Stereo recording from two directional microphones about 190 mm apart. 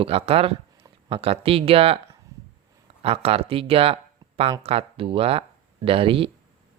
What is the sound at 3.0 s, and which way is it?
Speech, 30° right (ahead or behind).